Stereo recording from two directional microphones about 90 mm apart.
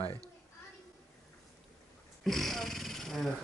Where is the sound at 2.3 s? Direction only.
5° left (ahead or behind).